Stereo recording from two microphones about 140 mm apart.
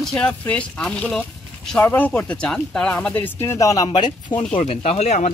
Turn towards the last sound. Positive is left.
turn(degrees=55)  # may be behind; listen again after turning